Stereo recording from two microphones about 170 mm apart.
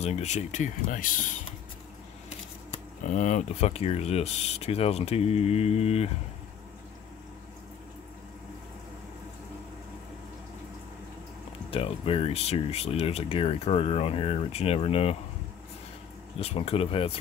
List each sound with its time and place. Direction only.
0.0 s speech: 40° left (ahead or behind)
3.1 s speech: 45° left (ahead or behind)
11.7 s speech: 35° left (ahead or behind)
16.3 s speech: 35° left (ahead or behind)